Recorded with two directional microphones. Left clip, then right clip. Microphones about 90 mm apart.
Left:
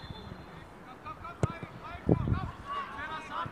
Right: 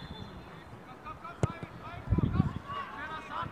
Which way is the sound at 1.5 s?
15° left (ahead or behind).